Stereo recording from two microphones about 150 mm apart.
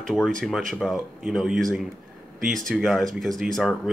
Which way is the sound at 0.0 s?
5° left (ahead or behind).